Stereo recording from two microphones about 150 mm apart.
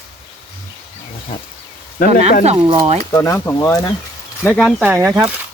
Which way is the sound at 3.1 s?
20° left (ahead or behind).